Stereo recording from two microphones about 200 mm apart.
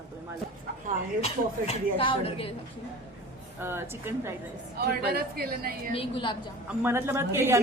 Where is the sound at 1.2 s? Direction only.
30° left (ahead or behind).